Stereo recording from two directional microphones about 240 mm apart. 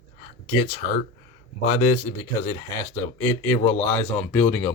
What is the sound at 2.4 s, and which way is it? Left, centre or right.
A man's voice, centre.